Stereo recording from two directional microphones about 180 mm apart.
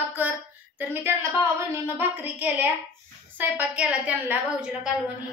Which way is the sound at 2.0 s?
10° right (ahead or behind).